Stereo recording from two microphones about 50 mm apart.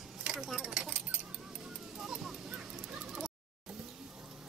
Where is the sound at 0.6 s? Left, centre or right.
Centre.